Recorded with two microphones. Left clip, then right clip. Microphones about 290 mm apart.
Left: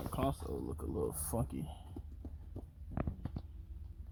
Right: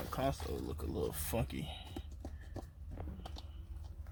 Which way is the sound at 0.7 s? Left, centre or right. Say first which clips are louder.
Left 1 dB; centre.